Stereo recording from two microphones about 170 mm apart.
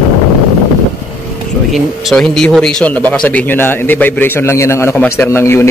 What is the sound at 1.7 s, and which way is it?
Speech, centre (ahead or behind).